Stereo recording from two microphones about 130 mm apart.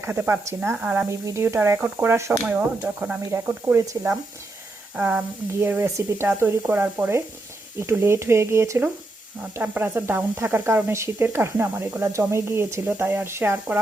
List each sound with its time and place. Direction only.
0.0 s speech: 15° right (ahead or behind)
0.9 s speech: 25° right (ahead or behind)